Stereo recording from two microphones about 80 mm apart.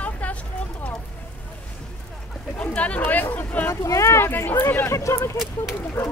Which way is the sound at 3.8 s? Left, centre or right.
Left.